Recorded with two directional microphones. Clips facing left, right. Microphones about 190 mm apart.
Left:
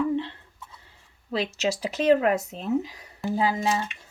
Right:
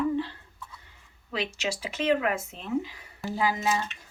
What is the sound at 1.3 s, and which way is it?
Speech, 35° left (ahead or behind).